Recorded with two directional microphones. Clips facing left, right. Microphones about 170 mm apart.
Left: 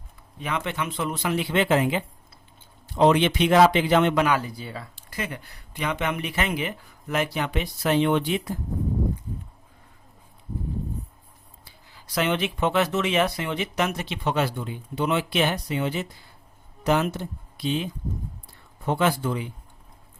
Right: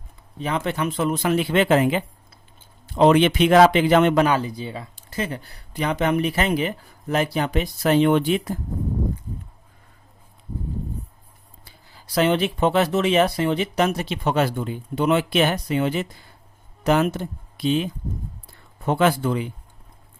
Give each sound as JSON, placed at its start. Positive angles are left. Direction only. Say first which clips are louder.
{"t": 0.3, "sound": "speech", "louder": "right 4 dB", "side_deg": -30}
{"t": 3.0, "sound": "speech", "louder": "right 3 dB", "side_deg": -60}
{"t": 4.3, "sound": "speech", "louder": "right 3 dB", "side_deg": -25}
{"t": 12.1, "sound": "speech", "louder": "right 5 dB", "side_deg": -35}
{"t": 18.9, "sound": "speech", "louder": "right 4 dB", "side_deg": -60}